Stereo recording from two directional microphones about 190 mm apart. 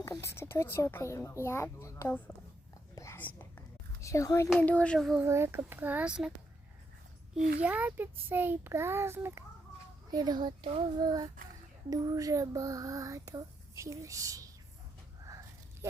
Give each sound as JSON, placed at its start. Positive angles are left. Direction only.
{"t": 0.0, "sound": "speech", "side_deg": 15}
{"t": 2.9, "sound": "whispering", "side_deg": 15}
{"t": 4.0, "sound": "speech", "side_deg": 15}
{"t": 4.4, "sound": "a child's voice", "side_deg": 5}
{"t": 5.2, "sound": "speech", "side_deg": -15}
{"t": 7.3, "sound": "a child's voice", "side_deg": -50}
{"t": 7.6, "sound": "a child's voice", "side_deg": -10}